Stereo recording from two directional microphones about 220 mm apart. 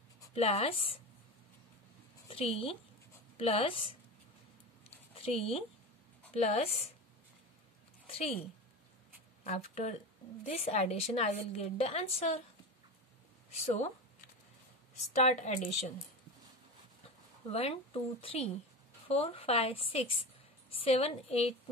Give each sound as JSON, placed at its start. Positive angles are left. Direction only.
{"t": 0.3, "sound": "a woman's voice", "side_deg": 25}
{"t": 2.2, "sound": "a woman's voice", "side_deg": 25}
{"t": 5.2, "sound": "a woman's voice", "side_deg": 25}
{"t": 8.1, "sound": "a woman's voice", "side_deg": 25}
{"t": 9.4, "sound": "a woman's voice", "side_deg": 30}
{"t": 13.5, "sound": "speech", "side_deg": 30}
{"t": 15.0, "sound": "speech", "side_deg": 30}
{"t": 17.5, "sound": "a woman's voice", "side_deg": 25}